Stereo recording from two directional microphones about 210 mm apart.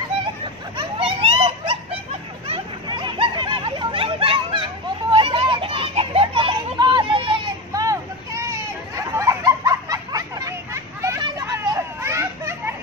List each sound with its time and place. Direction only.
0.7 s children playing: 25° right (ahead or behind)
2.4 s a sound: 25° right (ahead or behind)
5.1 s children playing: 25° right (ahead or behind)